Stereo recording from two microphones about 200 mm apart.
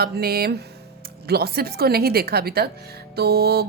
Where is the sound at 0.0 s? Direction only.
50° right (ahead or behind).